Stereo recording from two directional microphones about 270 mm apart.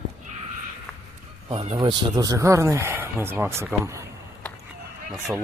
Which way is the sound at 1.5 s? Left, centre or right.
Centre.